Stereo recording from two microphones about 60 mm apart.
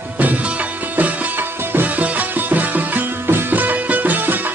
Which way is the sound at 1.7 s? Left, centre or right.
Right.